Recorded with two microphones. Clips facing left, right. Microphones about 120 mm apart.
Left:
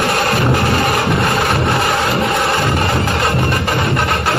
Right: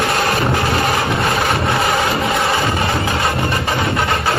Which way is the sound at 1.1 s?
Centre (ahead or behind).